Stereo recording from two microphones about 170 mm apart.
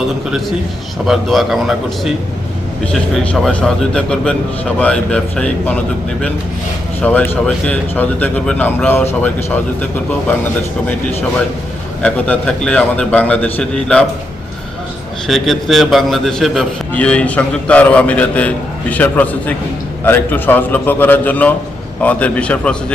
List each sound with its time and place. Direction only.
1.0 s a man's voice: centre (ahead or behind)
7.0 s a man's voice: 10° left (ahead or behind)
12.0 s a man's voice: 5° left (ahead or behind)
15.3 s a man's voice: centre (ahead or behind)